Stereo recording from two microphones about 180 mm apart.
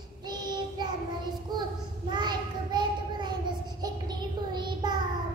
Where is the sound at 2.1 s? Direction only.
25° right (ahead or behind).